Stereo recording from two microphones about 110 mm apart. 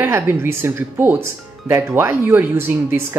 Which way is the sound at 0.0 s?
20° right (ahead or behind).